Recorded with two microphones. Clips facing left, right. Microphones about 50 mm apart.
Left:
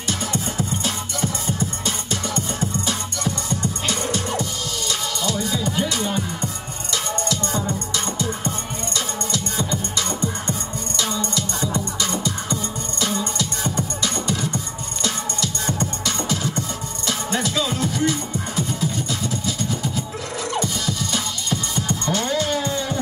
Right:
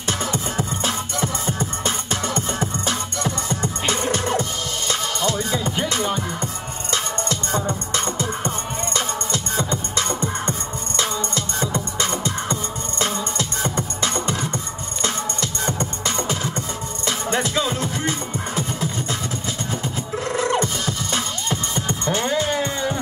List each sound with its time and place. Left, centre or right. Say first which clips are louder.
0.2 s music: right 1 dB; right
20.3 s music: right 3 dB; right